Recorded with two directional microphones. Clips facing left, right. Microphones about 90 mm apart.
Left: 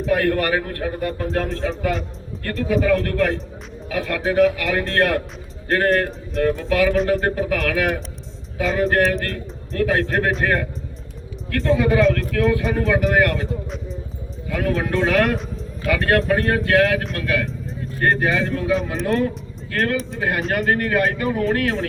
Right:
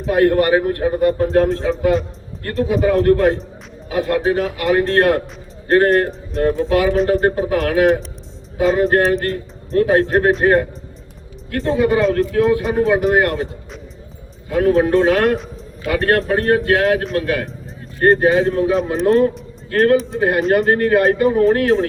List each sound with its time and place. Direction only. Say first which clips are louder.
0.1 s a man's voice: right 6 dB; 25° right (ahead or behind)
14.5 s a man's voice: right 8 dB; 30° right (ahead or behind)